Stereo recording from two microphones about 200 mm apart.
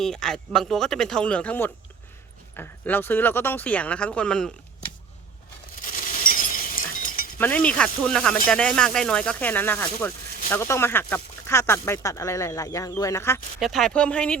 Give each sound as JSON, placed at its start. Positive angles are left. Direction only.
{"t": 0.0, "sound": "speech", "side_deg": 5}
{"t": 5.8, "sound": "glass", "side_deg": 45}
{"t": 7.3, "sound": "speech", "side_deg": 10}
{"t": 13.6, "sound": "speech", "side_deg": 0}